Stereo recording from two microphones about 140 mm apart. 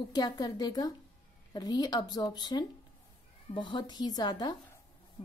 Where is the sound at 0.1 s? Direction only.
30° left (ahead or behind).